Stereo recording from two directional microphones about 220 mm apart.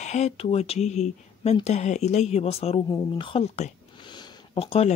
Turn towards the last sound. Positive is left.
turn(degrees=25)  # may be behind; listen again after turning